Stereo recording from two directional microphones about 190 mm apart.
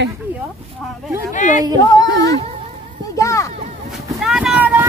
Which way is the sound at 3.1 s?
15° left (ahead or behind).